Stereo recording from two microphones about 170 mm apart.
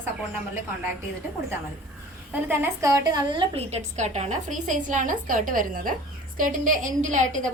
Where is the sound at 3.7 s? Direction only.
40° right (ahead or behind).